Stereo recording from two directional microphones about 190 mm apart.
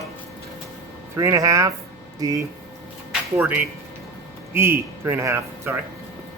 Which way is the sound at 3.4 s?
5° right (ahead or behind).